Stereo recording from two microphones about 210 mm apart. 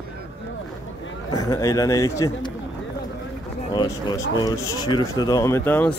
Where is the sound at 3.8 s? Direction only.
15° left (ahead or behind).